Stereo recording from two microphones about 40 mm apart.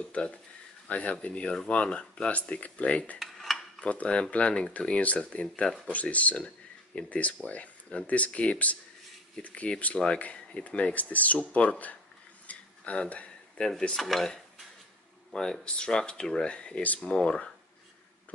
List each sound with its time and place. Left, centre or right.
0.0 s speech: left
3.2 s cutlery: centre
3.8 s speech: left
12.4 s a sound: left
13.6 s speech: centre
13.9 s speech: centre
15.3 s speech: centre